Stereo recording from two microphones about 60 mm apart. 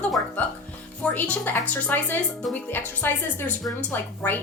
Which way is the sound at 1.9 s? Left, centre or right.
Left.